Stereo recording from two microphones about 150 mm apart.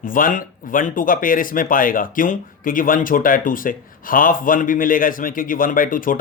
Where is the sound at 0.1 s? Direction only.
65° left (ahead or behind).